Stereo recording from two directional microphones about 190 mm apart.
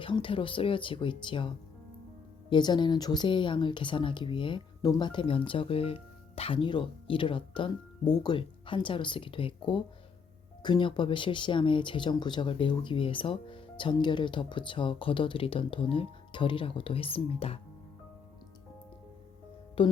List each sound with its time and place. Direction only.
0.0 s speech: 25° left (ahead or behind)
19.8 s speech: 25° left (ahead or behind)